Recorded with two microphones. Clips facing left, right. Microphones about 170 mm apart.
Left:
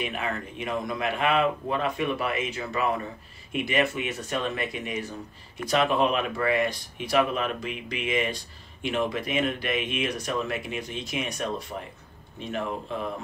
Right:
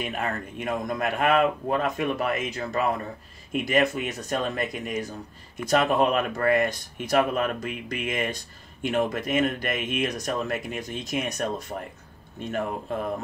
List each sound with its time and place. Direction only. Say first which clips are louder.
0.0 s speech: right 1 dB; 45° right (ahead or behind)